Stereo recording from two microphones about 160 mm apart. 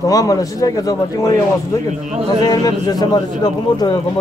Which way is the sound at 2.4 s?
25° left (ahead or behind).